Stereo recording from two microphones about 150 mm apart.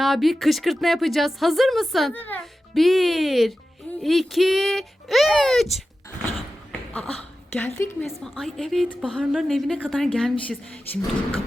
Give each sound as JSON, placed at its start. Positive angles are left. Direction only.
{"t": 0.0, "sound": "speech", "side_deg": 0}
{"t": 2.1, "sound": "speech", "side_deg": 10}
{"t": 2.7, "sound": "speech", "side_deg": 0}
{"t": 6.9, "sound": "a woman's voice", "side_deg": 10}
{"t": 8.2, "sound": "speech", "side_deg": 0}